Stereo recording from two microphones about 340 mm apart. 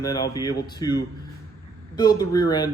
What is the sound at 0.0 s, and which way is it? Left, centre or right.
Speech, centre.